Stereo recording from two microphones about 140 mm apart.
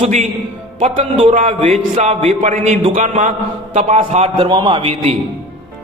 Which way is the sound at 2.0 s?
50° right (ahead or behind).